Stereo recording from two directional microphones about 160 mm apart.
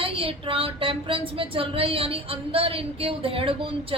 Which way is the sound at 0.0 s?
35° right (ahead or behind).